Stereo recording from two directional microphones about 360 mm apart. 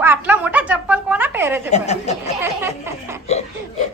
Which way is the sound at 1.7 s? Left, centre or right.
Centre.